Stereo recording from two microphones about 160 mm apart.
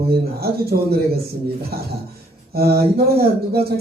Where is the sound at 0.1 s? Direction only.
75° right (ahead or behind).